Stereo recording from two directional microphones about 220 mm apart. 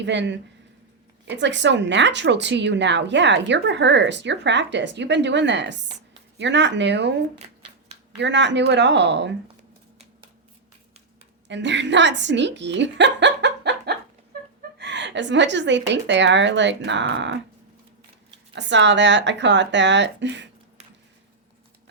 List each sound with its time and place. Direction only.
0.0 s a woman's voice: 55° right (ahead or behind)
8.1 s a woman's voice: 55° right (ahead or behind)
11.4 s a woman's voice: 55° right (ahead or behind)
18.5 s a woman's voice: 55° right (ahead or behind)